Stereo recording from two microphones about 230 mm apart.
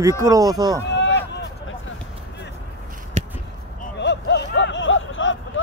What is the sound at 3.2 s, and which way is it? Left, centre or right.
Basketball bounce, right.